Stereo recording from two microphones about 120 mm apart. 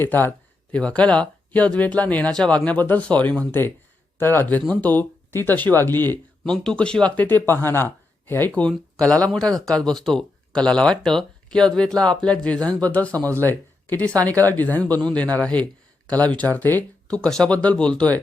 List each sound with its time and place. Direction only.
0.0 s speech: 15° left (ahead or behind)
6.4 s speech: 5° left (ahead or behind)